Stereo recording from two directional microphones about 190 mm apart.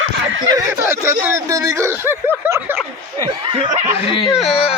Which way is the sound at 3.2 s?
30° right (ahead or behind).